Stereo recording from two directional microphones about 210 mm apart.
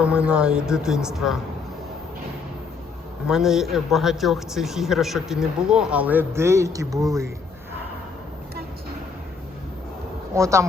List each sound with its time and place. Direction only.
0.0 s a man's voice: 5° right (ahead or behind)
3.2 s a man's voice: centre (ahead or behind)
10.3 s speech: 15° right (ahead or behind)